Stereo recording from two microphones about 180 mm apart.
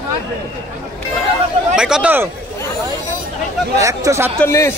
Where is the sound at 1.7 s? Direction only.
5° right (ahead or behind).